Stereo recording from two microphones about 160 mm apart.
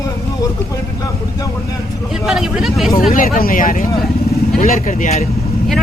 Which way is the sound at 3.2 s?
60° left (ahead or behind).